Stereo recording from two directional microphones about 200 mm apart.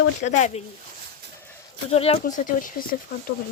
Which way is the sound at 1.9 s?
30° left (ahead or behind).